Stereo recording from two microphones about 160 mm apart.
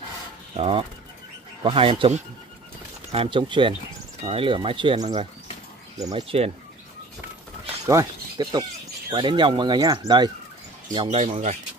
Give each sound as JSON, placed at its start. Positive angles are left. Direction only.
{"t": 0.6, "sound": "speech", "side_deg": -35}
{"t": 6.1, "sound": "speech", "side_deg": -40}
{"t": 7.8, "sound": "speech", "side_deg": -20}
{"t": 11.0, "sound": "speech", "side_deg": -40}